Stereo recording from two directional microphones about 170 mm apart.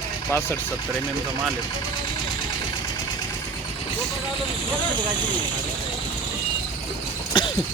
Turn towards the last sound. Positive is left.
turn(degrees=25)  # may be behind; listen again after turning